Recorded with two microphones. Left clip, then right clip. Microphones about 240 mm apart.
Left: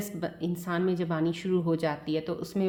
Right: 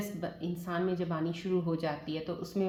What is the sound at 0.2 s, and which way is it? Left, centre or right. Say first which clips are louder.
Speech: left 5 dB; left.